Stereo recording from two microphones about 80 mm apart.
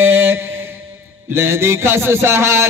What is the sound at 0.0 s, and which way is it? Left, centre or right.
Mantra, right.